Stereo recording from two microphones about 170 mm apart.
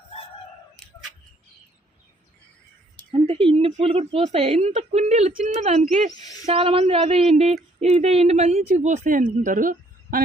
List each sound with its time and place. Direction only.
3.1 s a sound: 35° right (ahead or behind)
3.6 s a woman's voice: 35° right (ahead or behind)
6.1 s speech: 20° left (ahead or behind)
6.4 s a woman's voice: 35° right (ahead or behind); by 10.2 s 50° right (ahead or behind)